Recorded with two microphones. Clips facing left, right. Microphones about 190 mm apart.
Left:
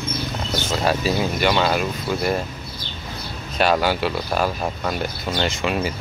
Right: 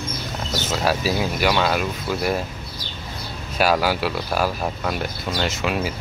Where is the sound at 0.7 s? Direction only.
5° right (ahead or behind).